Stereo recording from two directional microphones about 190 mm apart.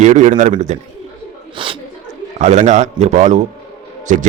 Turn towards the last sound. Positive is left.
turn(degrees=-40)  # may be behind; listen again after turning